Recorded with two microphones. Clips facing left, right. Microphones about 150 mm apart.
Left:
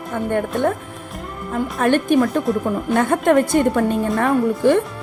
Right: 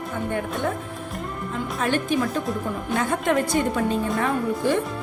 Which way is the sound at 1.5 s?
55° left (ahead or behind).